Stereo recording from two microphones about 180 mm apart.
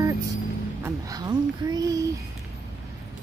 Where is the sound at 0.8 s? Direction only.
20° right (ahead or behind).